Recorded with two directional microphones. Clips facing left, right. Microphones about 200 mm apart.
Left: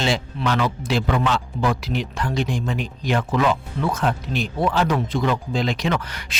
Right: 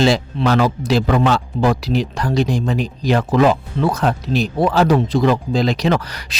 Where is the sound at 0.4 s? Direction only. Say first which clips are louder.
Right 7 dB; 40° right (ahead or behind).